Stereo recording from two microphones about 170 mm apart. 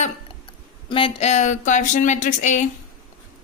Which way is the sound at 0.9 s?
30° left (ahead or behind).